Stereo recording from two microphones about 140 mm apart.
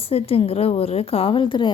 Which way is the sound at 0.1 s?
45° left (ahead or behind).